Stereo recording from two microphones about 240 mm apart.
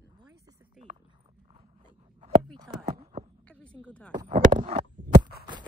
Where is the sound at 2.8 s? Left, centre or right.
Right.